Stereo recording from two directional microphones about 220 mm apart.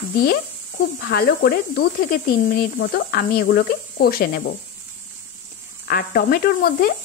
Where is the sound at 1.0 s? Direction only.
45° left (ahead or behind).